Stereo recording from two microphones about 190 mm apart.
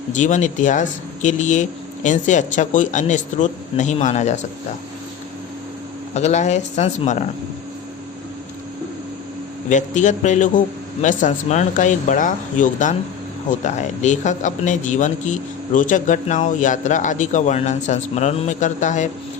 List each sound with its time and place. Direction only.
0.1 s a man's voice: 40° left (ahead or behind)
6.1 s a man's voice: 35° left (ahead or behind)
9.6 s a man's voice: 40° left (ahead or behind)